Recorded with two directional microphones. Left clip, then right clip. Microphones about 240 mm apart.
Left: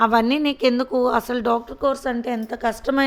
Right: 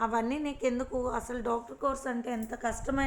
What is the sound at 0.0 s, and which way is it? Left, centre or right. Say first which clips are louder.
Speech: left 13 dB; left.